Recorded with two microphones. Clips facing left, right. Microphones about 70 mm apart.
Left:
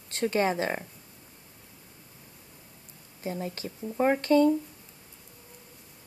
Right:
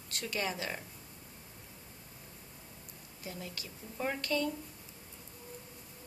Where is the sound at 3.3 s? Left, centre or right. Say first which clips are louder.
Left 11 dB; left.